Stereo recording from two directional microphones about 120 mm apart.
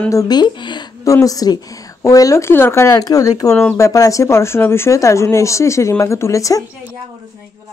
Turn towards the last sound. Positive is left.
turn(degrees=25)  # may be behind; listen again after turning